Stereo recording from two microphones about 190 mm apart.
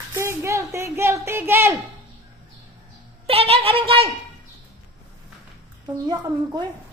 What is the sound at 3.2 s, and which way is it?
Speech, 30° right (ahead or behind).